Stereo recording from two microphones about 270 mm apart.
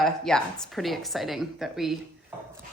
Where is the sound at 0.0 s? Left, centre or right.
Centre.